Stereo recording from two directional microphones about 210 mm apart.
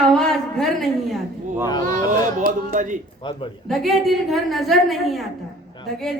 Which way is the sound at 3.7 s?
Centre (ahead or behind).